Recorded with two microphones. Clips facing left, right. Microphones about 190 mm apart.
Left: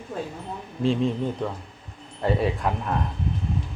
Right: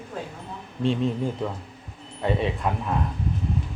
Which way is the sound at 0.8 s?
Centre (ahead or behind).